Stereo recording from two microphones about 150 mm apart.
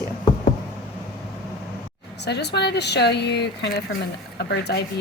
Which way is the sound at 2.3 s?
90° left.